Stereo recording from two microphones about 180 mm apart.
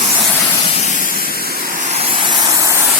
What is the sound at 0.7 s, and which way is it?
Spray, 40° left (ahead or behind).